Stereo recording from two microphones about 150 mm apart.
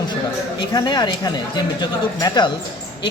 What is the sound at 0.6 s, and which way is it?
Speech, 30° left (ahead or behind).